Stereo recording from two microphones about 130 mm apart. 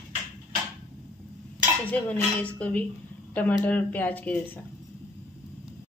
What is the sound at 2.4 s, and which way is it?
A woman's voice, 10° left (ahead or behind).